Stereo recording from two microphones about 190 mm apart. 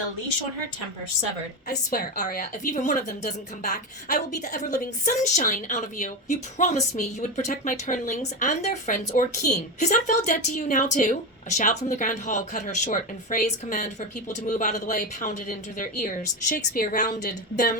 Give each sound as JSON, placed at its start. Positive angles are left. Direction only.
{"t": 1.9, "sound": "a woman's voice", "side_deg": 45}